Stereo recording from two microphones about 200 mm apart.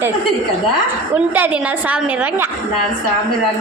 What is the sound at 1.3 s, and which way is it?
A woman's voice, 5° right (ahead or behind).